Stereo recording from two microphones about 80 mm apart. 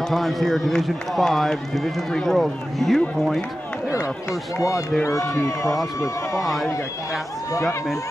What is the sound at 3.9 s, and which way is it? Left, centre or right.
Speech, left.